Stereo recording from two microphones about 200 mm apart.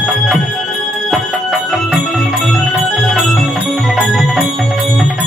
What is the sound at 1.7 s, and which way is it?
Music, centre (ahead or behind).